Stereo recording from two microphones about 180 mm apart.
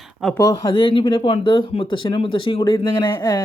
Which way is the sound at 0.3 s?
20° left (ahead or behind).